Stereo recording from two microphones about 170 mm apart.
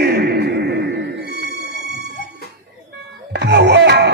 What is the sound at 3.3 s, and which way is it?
Music, 85° right.